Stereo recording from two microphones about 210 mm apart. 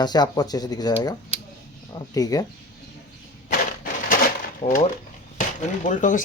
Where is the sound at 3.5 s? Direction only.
40° left (ahead or behind).